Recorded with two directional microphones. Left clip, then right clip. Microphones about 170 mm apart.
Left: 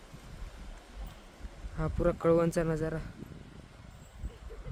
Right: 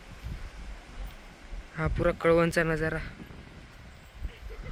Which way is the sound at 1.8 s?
Centre (ahead or behind).